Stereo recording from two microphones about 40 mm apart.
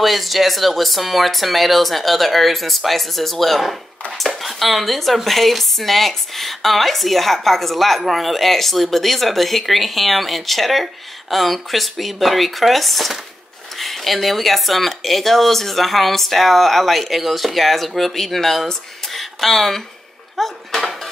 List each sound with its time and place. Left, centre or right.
0.0 s speech: centre
20.3 s dishes: centre